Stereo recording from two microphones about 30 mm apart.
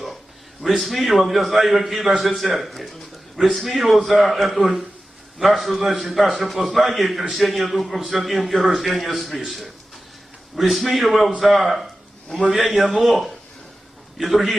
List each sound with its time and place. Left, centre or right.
0.6 s a man's voice: centre
12.5 s a man's voice: right
12.7 s a man's voice: centre